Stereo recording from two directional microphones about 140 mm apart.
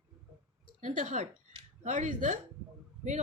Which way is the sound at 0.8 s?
65° right (ahead or behind).